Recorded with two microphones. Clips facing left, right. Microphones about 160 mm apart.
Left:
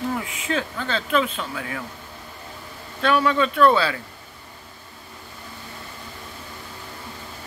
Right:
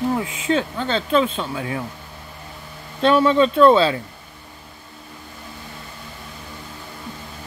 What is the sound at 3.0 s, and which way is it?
Speech, 25° right (ahead or behind).